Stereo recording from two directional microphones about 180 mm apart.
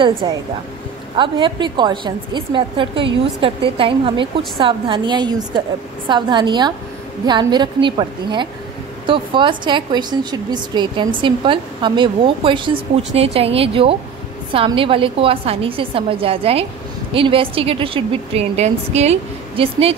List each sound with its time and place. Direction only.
0.0 s a woman's voice: 25° right (ahead or behind)